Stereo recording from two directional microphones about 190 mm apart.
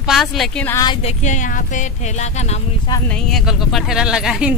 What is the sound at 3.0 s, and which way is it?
Speech, 5° left (ahead or behind).